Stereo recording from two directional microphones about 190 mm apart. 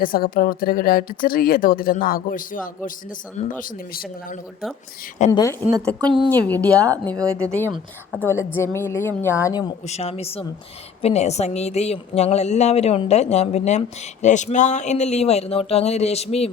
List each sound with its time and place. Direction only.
0.0 s speech: 50° left (ahead or behind)
5.3 s a woman's voice: 20° left (ahead or behind)
5.8 s a woman's voice: 5° left (ahead or behind)
6.7 s speech: 15° right (ahead or behind)
8.2 s a woman's voice: 10° left (ahead or behind)
9.9 s a woman's voice: 35° left (ahead or behind)